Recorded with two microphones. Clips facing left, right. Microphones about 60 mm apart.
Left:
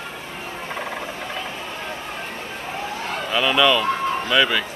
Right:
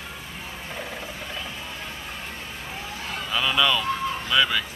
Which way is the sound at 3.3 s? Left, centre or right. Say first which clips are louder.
Left 5 dB; left.